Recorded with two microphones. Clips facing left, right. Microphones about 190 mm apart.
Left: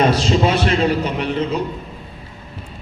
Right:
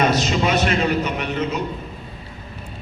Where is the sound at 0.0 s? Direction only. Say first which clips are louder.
Left 3 dB; 30° left (ahead or behind).